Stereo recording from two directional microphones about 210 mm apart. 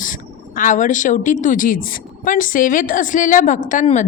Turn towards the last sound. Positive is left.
turn(degrees=35)  # may be behind; listen again after turning